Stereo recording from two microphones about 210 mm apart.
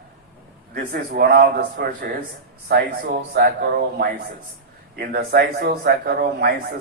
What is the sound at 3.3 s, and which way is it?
A man's voice, 45° right (ahead or behind).